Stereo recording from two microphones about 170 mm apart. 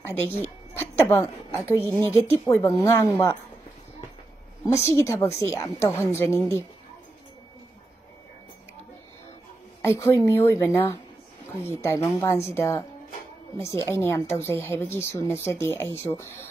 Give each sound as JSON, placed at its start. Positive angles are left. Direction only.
{"t": 0.0, "sound": "a sound", "side_deg": 15}
{"t": 1.7, "sound": "a woman's voice", "side_deg": 15}
{"t": 4.6, "sound": "a woman's voice", "side_deg": 15}
{"t": 9.8, "sound": "a woman's voice", "side_deg": 15}